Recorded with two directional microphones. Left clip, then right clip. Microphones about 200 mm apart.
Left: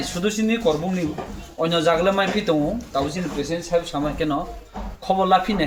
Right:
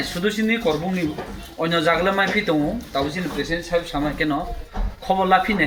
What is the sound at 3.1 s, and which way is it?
A man's voice, 20° left (ahead or behind).